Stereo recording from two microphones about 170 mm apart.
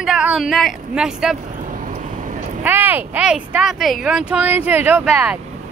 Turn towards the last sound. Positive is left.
turn(degrees=-5)  # may be behind; listen again after turning